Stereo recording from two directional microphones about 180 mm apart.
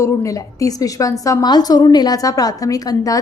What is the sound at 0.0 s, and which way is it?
A woman's voice, 15° left (ahead or behind).